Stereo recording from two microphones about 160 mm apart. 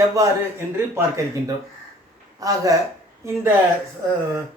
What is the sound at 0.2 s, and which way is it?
Speech, 20° right (ahead or behind).